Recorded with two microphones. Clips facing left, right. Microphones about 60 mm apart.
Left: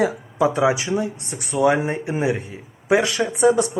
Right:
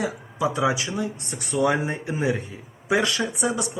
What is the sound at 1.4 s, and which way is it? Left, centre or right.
Speech, centre.